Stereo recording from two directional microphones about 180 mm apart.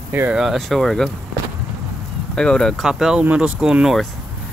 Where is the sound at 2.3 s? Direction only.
5° left (ahead or behind).